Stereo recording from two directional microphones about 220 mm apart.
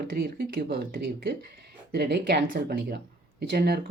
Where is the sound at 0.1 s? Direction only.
40° right (ahead or behind).